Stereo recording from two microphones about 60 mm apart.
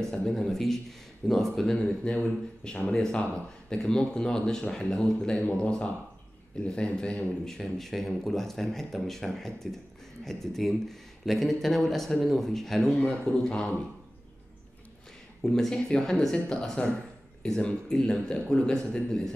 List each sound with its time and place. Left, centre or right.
0.2 s a man's voice: centre
1.8 s a man's voice: centre
5.4 s speech: left
6.5 s a man's voice: centre
15.4 s a man's voice: centre